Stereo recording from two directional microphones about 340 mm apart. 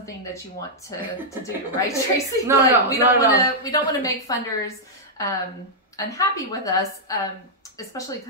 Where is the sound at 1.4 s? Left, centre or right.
Centre.